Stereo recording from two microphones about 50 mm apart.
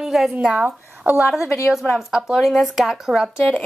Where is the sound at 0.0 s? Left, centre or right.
Centre.